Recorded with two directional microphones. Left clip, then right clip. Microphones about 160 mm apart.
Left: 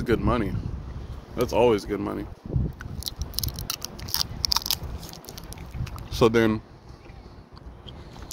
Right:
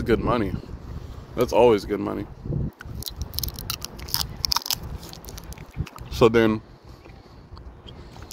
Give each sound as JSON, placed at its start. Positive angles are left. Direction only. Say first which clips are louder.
{"t": 0.0, "sound": "speech", "louder": "right 2 dB", "side_deg": -25}
{"t": 2.8, "sound": "a sound", "louder": "left 1 dB", "side_deg": -20}
{"t": 5.9, "sound": "boat", "louder": "right 3 dB", "side_deg": -20}